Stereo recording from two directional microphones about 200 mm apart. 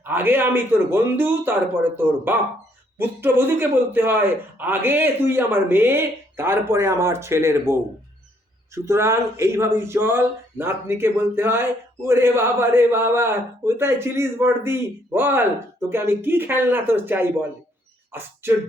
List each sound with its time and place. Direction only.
0.0 s speech: 10° right (ahead or behind)